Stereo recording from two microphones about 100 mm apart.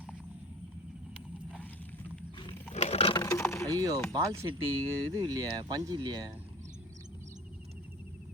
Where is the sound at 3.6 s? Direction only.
35° right (ahead or behind).